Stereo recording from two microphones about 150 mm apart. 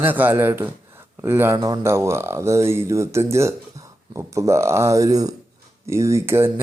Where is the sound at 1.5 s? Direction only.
25° right (ahead or behind).